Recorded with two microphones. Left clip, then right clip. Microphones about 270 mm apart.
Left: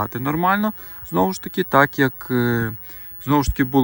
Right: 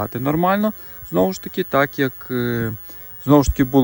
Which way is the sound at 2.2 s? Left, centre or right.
Left.